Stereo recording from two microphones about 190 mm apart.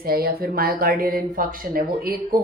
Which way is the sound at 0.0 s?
50° right (ahead or behind).